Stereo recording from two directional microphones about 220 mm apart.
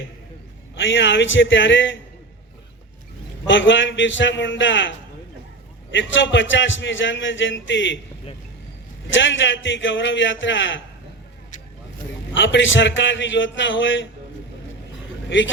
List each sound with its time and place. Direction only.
0.8 s a man's voice: 55° left (ahead or behind)
3.4 s a man's voice: 55° left (ahead or behind)
9.1 s a man's voice: 60° left (ahead or behind)
12.3 s a man's voice: 55° left (ahead or behind)